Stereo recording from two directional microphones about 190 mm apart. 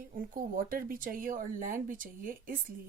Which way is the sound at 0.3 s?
45° right (ahead or behind).